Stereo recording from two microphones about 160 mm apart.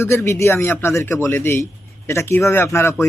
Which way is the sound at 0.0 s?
15° left (ahead or behind).